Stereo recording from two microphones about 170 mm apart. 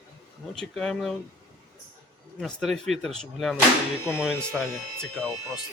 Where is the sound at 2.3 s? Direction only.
5° left (ahead or behind).